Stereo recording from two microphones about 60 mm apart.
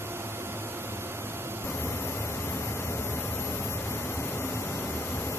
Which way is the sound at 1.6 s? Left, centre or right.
Left.